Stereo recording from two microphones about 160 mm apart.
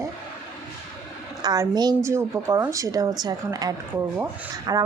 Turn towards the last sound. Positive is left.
turn(degrees=-25)  # may be behind; listen again after turning